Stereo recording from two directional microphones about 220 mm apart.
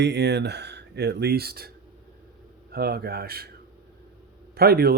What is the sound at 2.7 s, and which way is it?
Speech, 45° right (ahead or behind).